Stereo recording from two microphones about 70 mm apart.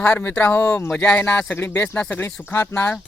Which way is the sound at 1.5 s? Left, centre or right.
Left.